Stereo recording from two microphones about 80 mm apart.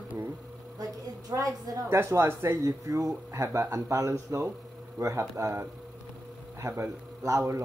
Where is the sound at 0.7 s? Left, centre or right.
Right.